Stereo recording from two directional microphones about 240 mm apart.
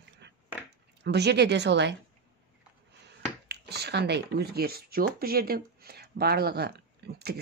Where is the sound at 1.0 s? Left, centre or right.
Right.